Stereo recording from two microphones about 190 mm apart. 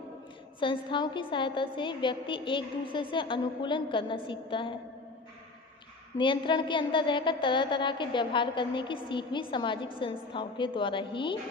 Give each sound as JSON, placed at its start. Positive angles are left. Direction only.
{"t": 0.6, "sound": "a woman's voice", "side_deg": 25}
{"t": 6.1, "sound": "a woman's voice", "side_deg": 25}